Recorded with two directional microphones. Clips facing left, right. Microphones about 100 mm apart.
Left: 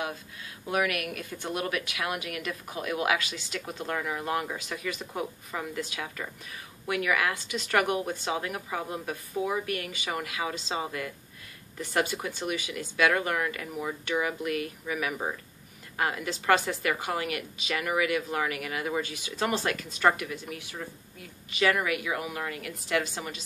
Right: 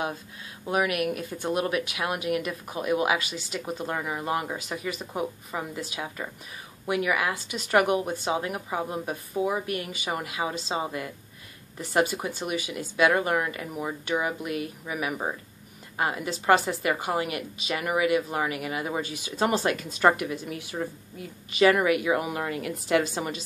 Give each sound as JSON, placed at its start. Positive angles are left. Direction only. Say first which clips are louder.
{"t": 0.7, "sound": "speech", "louder": "right 3 dB", "side_deg": -25}